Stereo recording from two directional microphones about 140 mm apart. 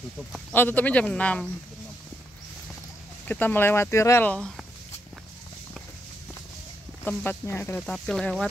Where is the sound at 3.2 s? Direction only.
10° left (ahead or behind).